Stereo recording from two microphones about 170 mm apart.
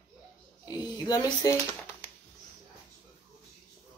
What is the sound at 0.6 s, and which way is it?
Speech, 25° left (ahead or behind).